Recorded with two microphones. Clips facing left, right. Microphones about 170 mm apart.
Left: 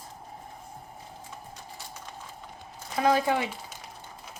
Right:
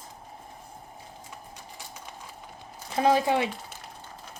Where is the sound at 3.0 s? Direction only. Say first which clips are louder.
Right 2 dB; 25° right (ahead or behind).